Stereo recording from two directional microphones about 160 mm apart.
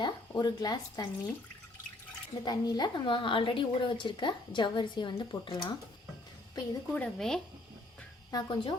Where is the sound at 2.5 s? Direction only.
25° left (ahead or behind).